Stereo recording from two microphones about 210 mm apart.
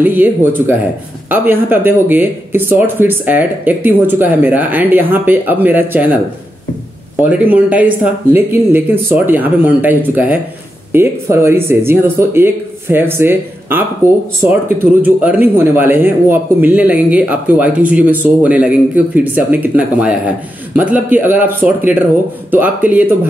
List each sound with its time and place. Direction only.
0.0 s speech: 10° right (ahead or behind)
7.2 s speech: 5° right (ahead or behind)